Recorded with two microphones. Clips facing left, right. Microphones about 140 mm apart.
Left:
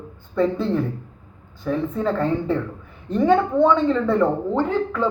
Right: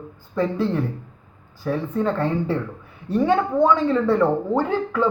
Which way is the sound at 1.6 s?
Centre (ahead or behind).